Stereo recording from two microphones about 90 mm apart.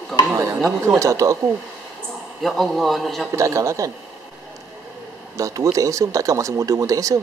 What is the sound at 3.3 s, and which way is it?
Speech, 35° right (ahead or behind).